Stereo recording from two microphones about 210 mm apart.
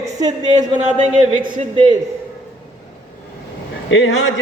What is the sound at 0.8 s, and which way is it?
Speech, 35° right (ahead or behind).